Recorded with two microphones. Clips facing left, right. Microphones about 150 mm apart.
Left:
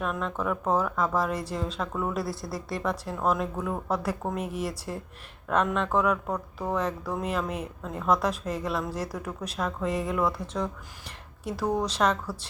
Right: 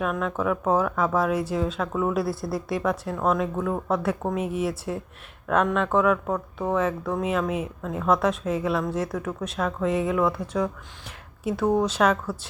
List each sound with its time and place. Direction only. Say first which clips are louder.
0.0 s speech: right 4 dB; 5° right (ahead or behind)
2.2 s speech: right 6 dB; 55° right (ahead or behind)
2.6 s speech: right 3 dB; centre (ahead or behind)